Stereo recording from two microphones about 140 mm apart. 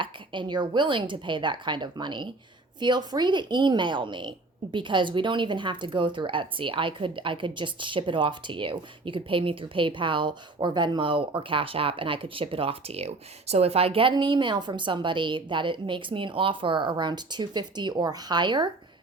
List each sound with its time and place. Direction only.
0.0 s a woman's voice: 35° right (ahead or behind)